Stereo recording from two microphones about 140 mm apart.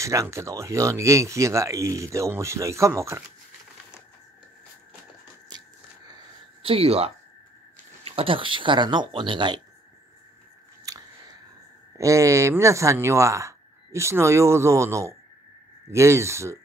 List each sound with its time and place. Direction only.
0.0 s speech: 20° right (ahead or behind)
5.5 s biting: 30° right (ahead or behind)
6.6 s speech: 45° right (ahead or behind)
10.9 s scissors: 25° right (ahead or behind)
12.0 s speech: 20° right (ahead or behind)